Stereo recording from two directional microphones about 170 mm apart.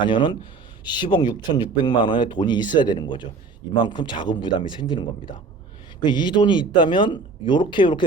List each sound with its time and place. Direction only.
0.0 s speech: 25° left (ahead or behind)